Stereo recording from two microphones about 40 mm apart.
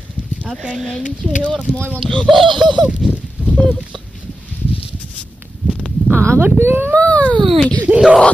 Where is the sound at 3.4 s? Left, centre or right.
Right.